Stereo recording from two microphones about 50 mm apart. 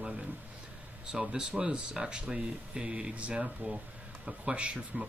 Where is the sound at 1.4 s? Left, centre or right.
Centre.